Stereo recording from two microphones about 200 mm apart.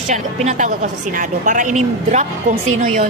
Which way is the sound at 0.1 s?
35° right (ahead or behind).